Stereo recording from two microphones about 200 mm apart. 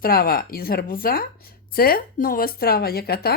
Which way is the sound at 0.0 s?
45° left (ahead or behind).